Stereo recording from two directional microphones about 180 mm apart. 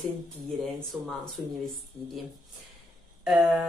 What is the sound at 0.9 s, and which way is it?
Speech, 5° right (ahead or behind).